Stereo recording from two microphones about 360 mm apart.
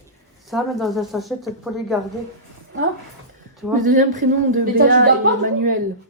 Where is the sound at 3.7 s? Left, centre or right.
Right.